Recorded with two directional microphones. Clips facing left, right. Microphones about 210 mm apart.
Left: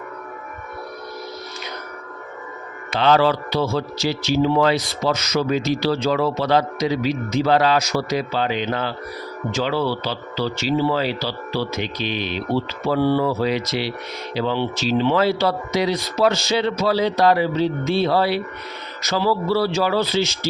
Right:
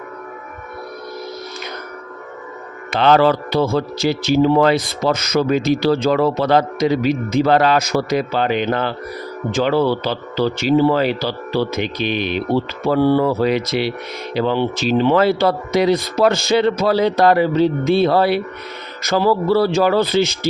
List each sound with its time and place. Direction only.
2.9 s speech: 55° right (ahead or behind)